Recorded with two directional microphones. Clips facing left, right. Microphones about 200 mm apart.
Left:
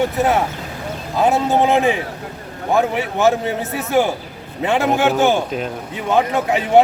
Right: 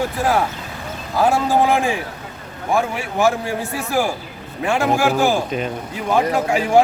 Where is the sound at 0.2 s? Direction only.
20° left (ahead or behind).